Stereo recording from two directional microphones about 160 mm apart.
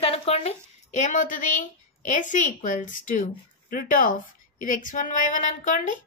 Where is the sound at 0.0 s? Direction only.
40° left (ahead or behind).